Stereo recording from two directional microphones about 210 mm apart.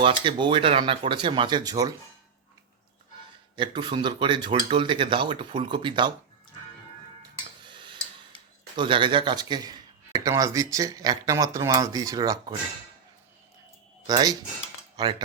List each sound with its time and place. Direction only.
0.0 s speech: 25° right (ahead or behind)
3.6 s speech: 20° right (ahead or behind)
8.7 s speech: 20° right (ahead or behind)
14.1 s speech: 20° right (ahead or behind)